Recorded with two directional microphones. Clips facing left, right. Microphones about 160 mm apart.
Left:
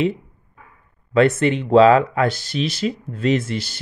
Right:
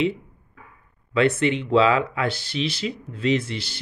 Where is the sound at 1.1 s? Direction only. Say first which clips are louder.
Left 4 dB; 45° left (ahead or behind).